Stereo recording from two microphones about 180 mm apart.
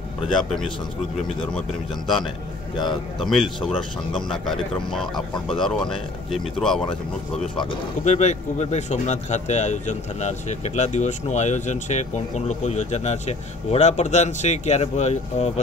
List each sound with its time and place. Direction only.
1.5 s speech: centre (ahead or behind)
8.0 s speech: 40° left (ahead or behind)